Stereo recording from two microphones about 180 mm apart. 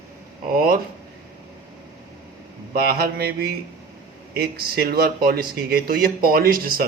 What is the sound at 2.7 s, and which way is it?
A man's voice, 60° right (ahead or behind).